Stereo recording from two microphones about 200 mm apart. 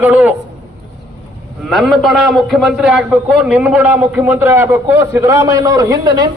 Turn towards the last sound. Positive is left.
turn(degrees=-20)  # may be behind; listen again after turning